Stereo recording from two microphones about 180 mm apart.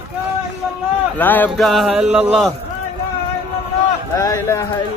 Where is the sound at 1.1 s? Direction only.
10° left (ahead or behind).